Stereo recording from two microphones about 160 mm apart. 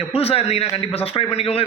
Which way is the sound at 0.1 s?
40° left (ahead or behind).